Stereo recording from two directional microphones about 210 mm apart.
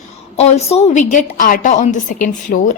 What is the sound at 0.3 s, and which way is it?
A woman's voice, 30° left (ahead or behind).